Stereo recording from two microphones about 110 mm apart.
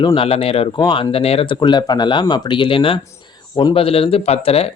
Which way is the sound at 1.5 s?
40° left (ahead or behind).